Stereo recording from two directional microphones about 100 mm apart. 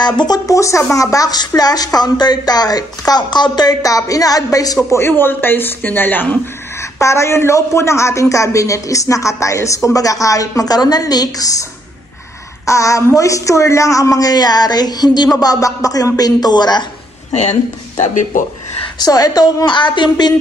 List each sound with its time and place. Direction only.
0.0 s speech: 45° left (ahead or behind)
4.9 s speech: 25° left (ahead or behind)
7.0 s speech: 30° left (ahead or behind)
12.6 s speech: 30° left (ahead or behind)
17.3 s speech: 90° left
18.9 s a woman's voice: 40° left (ahead or behind)